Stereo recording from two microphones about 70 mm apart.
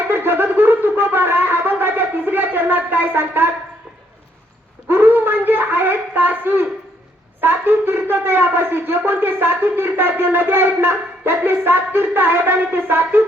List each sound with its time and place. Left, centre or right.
0.1 s shofar: right
4.9 s a sound: right
7.4 s speech: right